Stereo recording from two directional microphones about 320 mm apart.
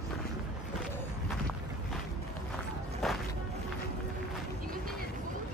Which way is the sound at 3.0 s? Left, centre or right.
Centre.